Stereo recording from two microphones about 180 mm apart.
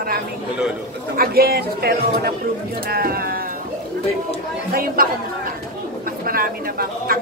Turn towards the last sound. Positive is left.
turn(degrees=-55)  # may be behind; listen again after turning